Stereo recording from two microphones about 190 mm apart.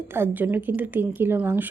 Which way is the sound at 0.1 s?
10° right (ahead or behind).